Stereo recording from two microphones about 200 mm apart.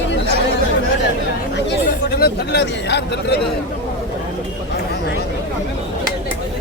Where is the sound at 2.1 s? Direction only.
55° left (ahead or behind).